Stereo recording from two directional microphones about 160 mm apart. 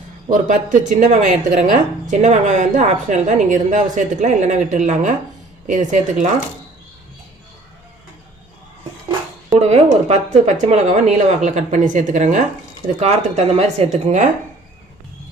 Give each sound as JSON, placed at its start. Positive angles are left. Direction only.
{"t": 0.3, "sound": "speech", "side_deg": -50}
{"t": 9.6, "sound": "speech", "side_deg": -45}